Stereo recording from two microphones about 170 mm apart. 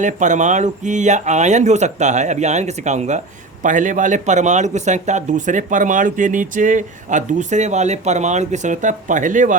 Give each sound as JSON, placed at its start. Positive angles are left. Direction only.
{"t": 0.0, "sound": "speech", "side_deg": -45}